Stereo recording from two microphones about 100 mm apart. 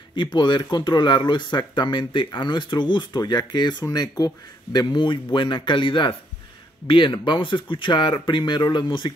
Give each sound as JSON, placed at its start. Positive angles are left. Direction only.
{"t": 0.1, "sound": "speech", "side_deg": 55}